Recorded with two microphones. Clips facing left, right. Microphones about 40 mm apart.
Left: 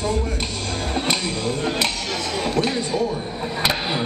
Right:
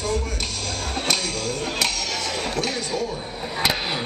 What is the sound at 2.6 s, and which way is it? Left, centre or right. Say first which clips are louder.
Speech: left 4 dB; left.